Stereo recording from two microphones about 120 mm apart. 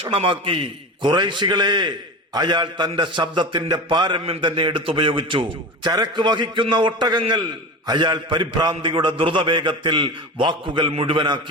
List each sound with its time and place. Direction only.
0.0 s a man's voice: 45° right (ahead or behind)